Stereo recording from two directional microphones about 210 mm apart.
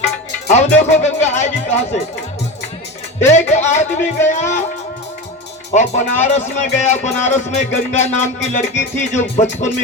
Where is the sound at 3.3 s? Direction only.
35° left (ahead or behind).